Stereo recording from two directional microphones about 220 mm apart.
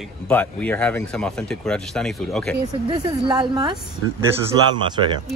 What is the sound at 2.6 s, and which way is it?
A woman's voice, 20° right (ahead or behind).